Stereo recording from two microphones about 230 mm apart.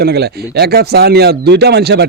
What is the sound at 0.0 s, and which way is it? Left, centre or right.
Speech, right.